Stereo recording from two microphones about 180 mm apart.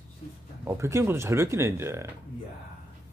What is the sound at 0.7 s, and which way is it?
Speech, 15° right (ahead or behind).